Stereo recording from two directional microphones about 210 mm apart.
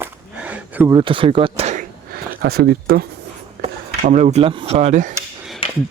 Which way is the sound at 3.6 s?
35° right (ahead or behind).